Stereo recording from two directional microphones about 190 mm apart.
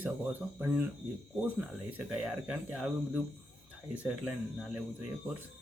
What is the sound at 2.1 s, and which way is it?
Speech, 5° right (ahead or behind).